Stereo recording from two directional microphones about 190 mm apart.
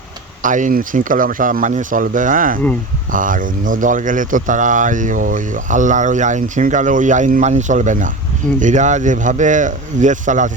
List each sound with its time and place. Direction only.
0.4 s speech: 45° right (ahead or behind)